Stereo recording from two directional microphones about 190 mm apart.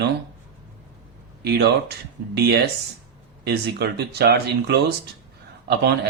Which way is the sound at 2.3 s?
55° right (ahead or behind).